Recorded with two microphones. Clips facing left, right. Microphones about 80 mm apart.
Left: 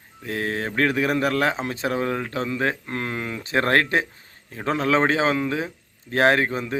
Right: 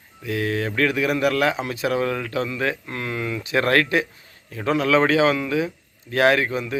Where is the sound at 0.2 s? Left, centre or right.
Left.